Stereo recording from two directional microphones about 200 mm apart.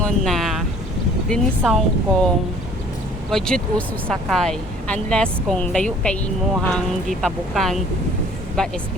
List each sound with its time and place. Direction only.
0.0 s boat: centre (ahead or behind)
1.3 s speech: centre (ahead or behind)